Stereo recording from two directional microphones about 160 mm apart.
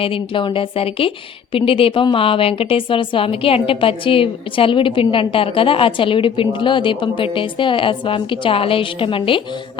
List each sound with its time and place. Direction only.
0.0 s a woman's voice: 35° left (ahead or behind)